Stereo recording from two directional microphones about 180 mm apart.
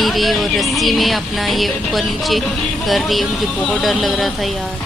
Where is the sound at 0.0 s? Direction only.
Centre (ahead or behind).